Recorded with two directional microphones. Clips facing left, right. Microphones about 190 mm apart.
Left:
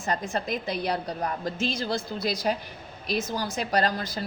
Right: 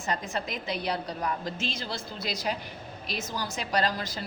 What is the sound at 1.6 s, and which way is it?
Speech, 50° left (ahead or behind).